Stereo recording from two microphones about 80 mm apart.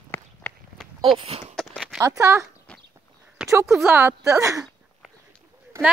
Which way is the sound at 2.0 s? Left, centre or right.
Right.